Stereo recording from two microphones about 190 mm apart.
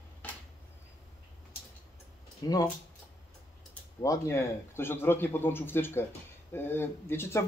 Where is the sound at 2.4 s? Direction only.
20° left (ahead or behind).